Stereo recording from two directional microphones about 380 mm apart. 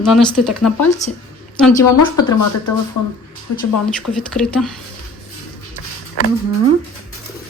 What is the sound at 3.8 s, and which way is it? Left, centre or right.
Speech, centre.